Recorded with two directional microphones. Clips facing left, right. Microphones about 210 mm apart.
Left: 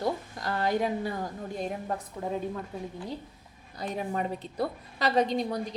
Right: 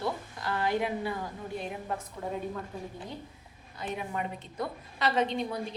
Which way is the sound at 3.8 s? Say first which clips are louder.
Left 3 dB; 35° left (ahead or behind).